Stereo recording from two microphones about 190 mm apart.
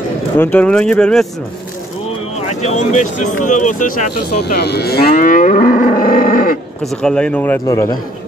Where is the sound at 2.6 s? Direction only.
40° left (ahead or behind).